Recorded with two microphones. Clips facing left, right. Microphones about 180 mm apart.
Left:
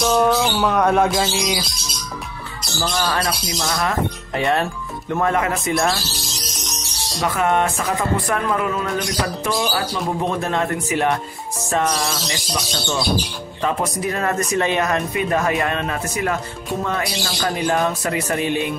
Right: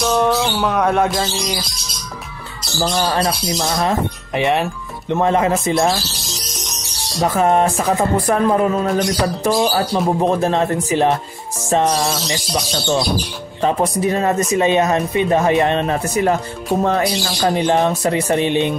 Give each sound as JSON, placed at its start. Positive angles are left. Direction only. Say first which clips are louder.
{"t": 0.0, "sound": "bird", "louder": "even", "side_deg": 0}
{"t": 2.9, "sound": "speech", "louder": "right 4 dB", "side_deg": -30}
{"t": 7.2, "sound": "speech", "louder": "right 4 dB", "side_deg": -35}